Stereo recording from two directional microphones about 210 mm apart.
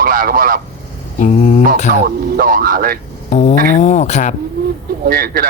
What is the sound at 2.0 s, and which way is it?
Speech, 45° right (ahead or behind).